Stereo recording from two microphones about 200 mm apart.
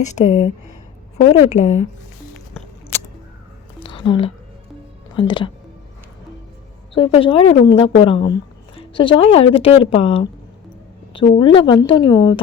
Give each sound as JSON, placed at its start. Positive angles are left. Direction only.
{"t": 0.0, "sound": "a woman's voice", "side_deg": 35}
{"t": 3.8, "sound": "a sound", "side_deg": 25}
{"t": 5.1, "sound": "a woman's voice", "side_deg": 25}
{"t": 6.9, "sound": "a woman's voice", "side_deg": 25}